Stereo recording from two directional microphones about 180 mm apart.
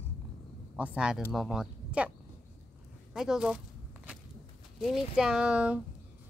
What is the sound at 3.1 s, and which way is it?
Speech, 5° right (ahead or behind).